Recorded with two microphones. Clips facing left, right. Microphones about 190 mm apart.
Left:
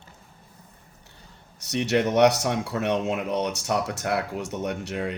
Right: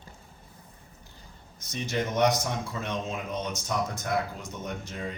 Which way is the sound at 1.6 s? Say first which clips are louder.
Left 8 dB; 70° left (ahead or behind).